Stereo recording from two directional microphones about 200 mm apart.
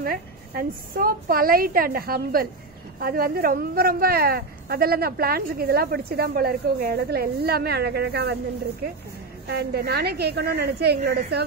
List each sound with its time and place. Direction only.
0.0 s speech: 45° right (ahead or behind)
9.5 s a woman's voice: 55° right (ahead or behind)